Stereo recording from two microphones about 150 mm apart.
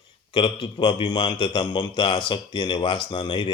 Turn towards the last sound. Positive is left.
turn(degrees=30)  # may be behind; listen again after turning